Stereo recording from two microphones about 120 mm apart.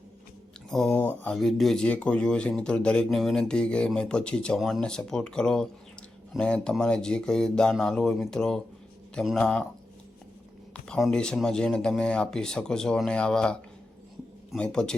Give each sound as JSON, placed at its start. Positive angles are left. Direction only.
{"t": 0.7, "sound": "speech", "side_deg": 5}
{"t": 0.9, "sound": "speech", "side_deg": 15}
{"t": 1.4, "sound": "speech", "side_deg": 5}
{"t": 10.8, "sound": "speech", "side_deg": 5}